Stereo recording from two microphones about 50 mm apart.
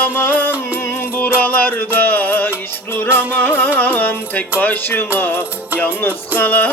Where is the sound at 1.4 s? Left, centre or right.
Left.